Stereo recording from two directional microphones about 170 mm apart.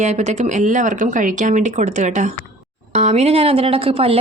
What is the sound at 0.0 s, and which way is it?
A woman's voice, 40° right (ahead or behind).